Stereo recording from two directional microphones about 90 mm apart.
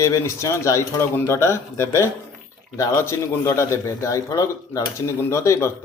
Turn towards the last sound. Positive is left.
turn(degrees=30)  # may be behind; listen again after turning